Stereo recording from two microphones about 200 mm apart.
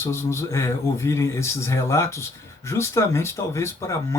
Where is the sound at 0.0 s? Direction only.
15° left (ahead or behind).